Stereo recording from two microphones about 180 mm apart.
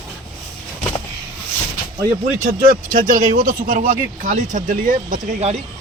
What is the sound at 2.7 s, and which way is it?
Speech, 50° right (ahead or behind).